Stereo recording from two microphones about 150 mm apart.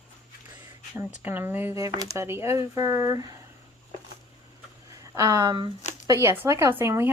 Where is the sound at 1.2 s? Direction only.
15° right (ahead or behind).